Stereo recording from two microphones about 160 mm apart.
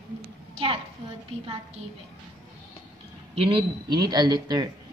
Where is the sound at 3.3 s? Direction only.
35° right (ahead or behind).